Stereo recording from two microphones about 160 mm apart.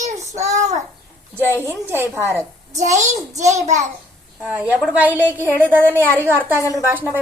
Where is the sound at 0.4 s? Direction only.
45° right (ahead or behind).